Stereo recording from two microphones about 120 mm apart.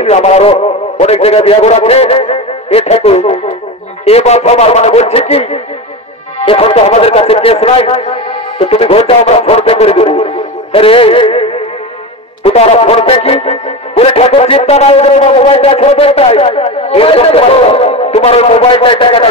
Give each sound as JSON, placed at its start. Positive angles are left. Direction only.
{"t": 0.0, "sound": "a man's voice", "side_deg": 65}
{"t": 6.4, "sound": "speech", "side_deg": 50}